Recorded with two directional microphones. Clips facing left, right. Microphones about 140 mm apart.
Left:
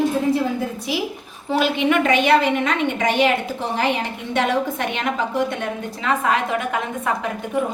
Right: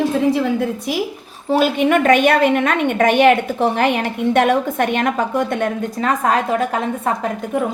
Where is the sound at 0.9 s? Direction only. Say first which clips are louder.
Right 3 dB; 50° right (ahead or behind).